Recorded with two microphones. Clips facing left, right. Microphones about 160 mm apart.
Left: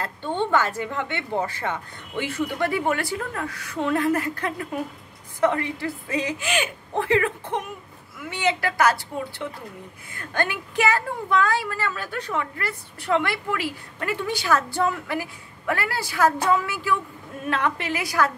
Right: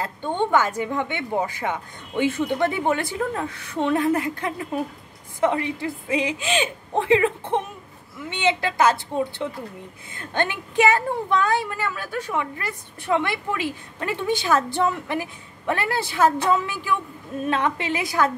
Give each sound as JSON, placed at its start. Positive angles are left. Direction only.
{"t": 0.0, "sound": "a woman's voice", "side_deg": -15}